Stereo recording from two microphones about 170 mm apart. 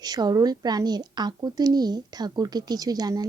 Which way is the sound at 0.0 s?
25° right (ahead or behind).